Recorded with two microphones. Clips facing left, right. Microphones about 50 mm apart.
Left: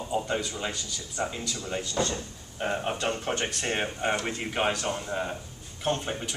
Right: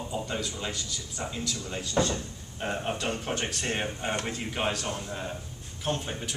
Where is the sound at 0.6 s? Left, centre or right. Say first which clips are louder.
Left 1 dB; centre.